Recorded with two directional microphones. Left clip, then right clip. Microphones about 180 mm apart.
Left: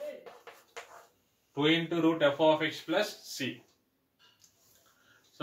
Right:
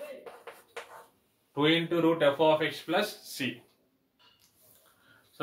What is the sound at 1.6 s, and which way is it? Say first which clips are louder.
Speech: right 2 dB; 15° right (ahead or behind).